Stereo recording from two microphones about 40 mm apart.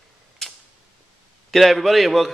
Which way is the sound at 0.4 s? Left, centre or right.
Centre.